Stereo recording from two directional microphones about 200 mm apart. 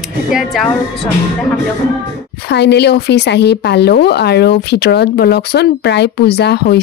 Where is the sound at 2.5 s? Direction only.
55° left (ahead or behind).